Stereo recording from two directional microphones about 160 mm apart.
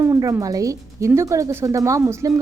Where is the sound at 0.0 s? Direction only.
20° right (ahead or behind).